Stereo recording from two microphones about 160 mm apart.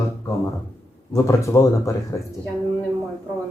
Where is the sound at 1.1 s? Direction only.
20° left (ahead or behind).